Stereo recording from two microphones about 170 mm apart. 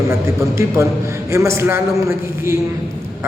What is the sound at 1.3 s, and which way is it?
Speech, 15° right (ahead or behind).